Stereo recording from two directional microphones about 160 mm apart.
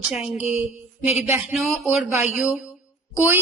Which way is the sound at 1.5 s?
Centre (ahead or behind).